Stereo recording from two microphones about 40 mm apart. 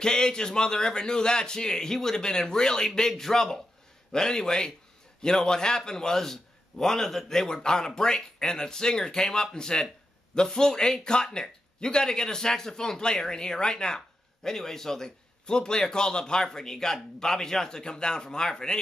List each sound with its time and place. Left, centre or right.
0.0 s a man's voice: centre